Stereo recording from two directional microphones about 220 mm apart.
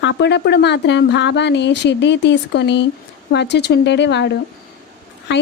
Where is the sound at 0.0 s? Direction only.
50° left (ahead or behind).